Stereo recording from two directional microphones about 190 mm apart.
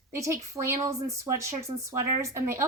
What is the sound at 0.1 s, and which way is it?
Speech, 15° right (ahead or behind).